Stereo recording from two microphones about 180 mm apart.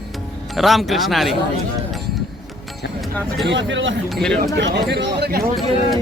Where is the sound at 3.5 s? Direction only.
90° right.